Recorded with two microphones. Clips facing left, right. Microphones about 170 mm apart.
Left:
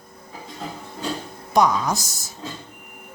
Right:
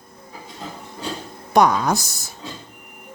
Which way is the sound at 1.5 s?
60° right (ahead or behind).